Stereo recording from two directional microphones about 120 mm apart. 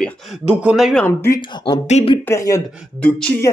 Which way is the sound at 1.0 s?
20° left (ahead or behind).